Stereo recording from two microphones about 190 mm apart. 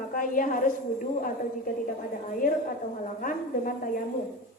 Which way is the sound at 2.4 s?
45° left (ahead or behind).